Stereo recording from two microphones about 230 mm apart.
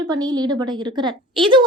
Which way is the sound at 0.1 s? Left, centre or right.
Centre.